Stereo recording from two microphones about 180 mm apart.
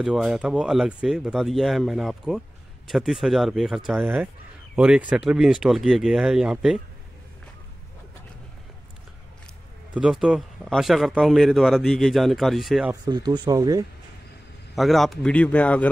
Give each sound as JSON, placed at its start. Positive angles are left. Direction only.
{"t": 0.0, "sound": "speech", "side_deg": 0}
{"t": 9.9, "sound": "speech", "side_deg": -5}
{"t": 13.0, "sound": "speech", "side_deg": -25}
{"t": 14.8, "sound": "speech", "side_deg": 0}